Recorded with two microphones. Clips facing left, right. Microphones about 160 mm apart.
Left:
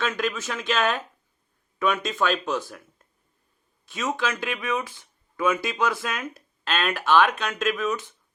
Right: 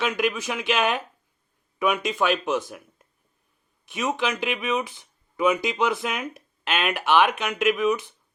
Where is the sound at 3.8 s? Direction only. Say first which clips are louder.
Right 1 dB; 20° right (ahead or behind).